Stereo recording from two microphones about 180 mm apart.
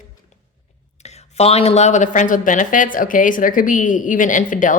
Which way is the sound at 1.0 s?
35° left (ahead or behind).